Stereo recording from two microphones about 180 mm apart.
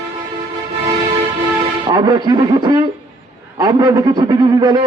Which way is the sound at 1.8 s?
20° right (ahead or behind).